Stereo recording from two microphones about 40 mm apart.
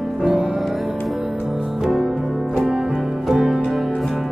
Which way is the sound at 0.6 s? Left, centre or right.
Centre.